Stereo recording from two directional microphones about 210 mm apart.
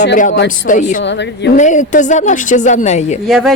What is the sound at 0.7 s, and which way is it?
A woman's voice, 35° left (ahead or behind).